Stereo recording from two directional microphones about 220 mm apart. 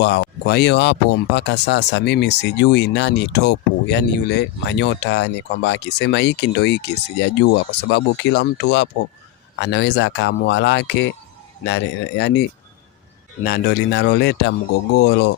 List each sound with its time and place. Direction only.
0.0 s speech: 50° left (ahead or behind)